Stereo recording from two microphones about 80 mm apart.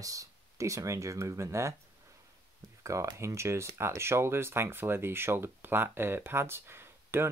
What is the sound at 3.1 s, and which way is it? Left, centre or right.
Speech, right.